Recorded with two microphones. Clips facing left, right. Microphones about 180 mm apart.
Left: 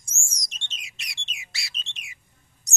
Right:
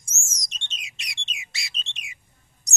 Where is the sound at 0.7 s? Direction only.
20° right (ahead or behind).